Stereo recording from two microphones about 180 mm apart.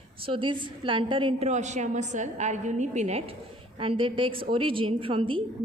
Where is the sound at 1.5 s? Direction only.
40° right (ahead or behind).